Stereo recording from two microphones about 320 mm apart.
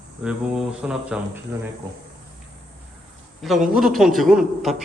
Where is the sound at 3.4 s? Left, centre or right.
Centre.